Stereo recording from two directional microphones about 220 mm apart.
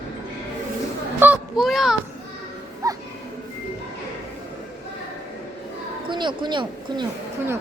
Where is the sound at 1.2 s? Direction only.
5° right (ahead or behind).